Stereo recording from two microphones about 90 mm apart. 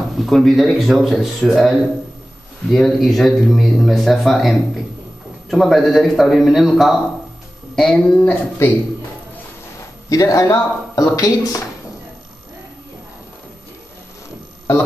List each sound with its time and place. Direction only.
0.2 s speech: centre (ahead or behind)
8.2 s speech: 20° left (ahead or behind)
10.0 s speech: 40° left (ahead or behind)